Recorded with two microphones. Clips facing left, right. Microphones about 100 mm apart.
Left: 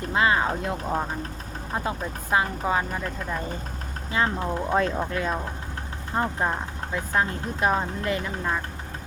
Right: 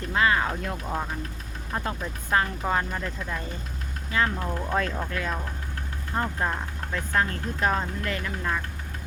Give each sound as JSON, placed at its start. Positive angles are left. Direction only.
{"t": 0.1, "sound": "speech", "side_deg": 20}
{"t": 4.1, "sound": "speech", "side_deg": 25}